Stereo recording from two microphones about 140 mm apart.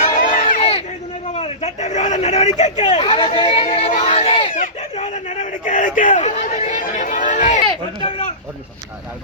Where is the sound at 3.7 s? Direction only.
45° left (ahead or behind).